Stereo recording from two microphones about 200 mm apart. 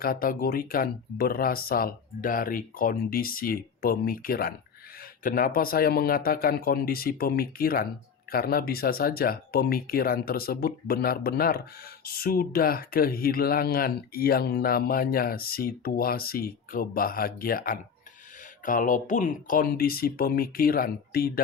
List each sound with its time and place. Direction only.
0.0 s speech: 45° left (ahead or behind)